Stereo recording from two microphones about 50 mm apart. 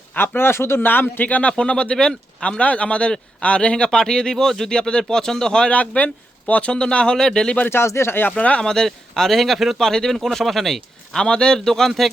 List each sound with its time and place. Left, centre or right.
0.2 s speech: left
1.3 s speech: left
6.0 s speech: left; by 7.5 s centre
7.7 s speech: left
8.4 s speech: left
8.6 s speech: centre
11.2 s speech: centre